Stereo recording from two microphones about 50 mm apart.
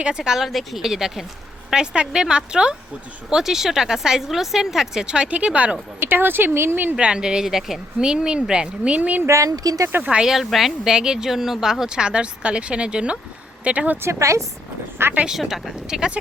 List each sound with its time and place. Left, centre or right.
0.1 s speech: centre
0.4 s speech: centre; by 5.5 s right
6.0 s speech: right
6.9 s speech: centre
9.0 s speech: right
9.2 s a woman's voice: right
10.0 s speech: right
10.4 s speech: centre; by 14.0 s right
14.0 s speech: right
15.3 s speech: centre